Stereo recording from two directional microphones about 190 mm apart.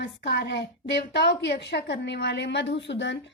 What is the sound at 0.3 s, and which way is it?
A woman's voice, 65° left (ahead or behind).